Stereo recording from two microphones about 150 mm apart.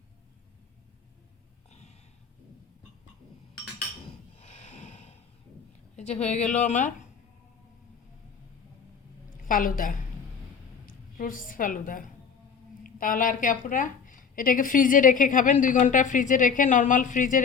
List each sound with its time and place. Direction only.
1.7 s a sound: 50° left (ahead or behind)
4.4 s snort: 45° left (ahead or behind)
6.0 s a woman's voice: 50° left (ahead or behind)
9.4 s a woman's voice: 65° left (ahead or behind)